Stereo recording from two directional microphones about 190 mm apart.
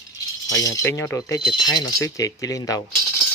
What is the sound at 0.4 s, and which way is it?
Speech, 20° left (ahead or behind).